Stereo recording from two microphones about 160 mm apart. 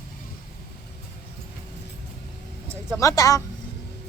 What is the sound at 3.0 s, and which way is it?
Speech, 20° left (ahead or behind).